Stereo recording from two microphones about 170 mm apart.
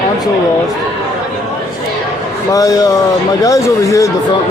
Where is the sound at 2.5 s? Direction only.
20° left (ahead or behind).